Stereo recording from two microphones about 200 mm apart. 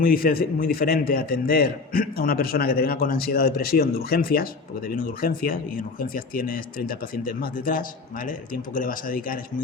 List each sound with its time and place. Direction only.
0.0 s speech: 45° left (ahead or behind)